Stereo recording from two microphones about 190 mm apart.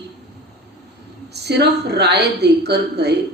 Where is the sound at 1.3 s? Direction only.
60° right (ahead or behind).